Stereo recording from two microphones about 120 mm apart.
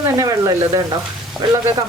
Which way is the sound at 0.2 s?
30° right (ahead or behind).